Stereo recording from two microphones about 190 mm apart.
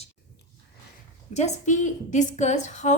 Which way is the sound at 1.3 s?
40° left (ahead or behind).